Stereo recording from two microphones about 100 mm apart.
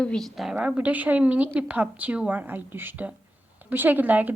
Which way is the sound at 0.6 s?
10° right (ahead or behind).